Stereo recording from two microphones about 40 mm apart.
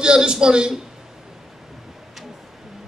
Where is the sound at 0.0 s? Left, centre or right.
Centre.